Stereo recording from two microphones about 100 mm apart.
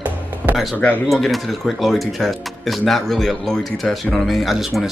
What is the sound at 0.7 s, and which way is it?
Speech, 15° left (ahead or behind).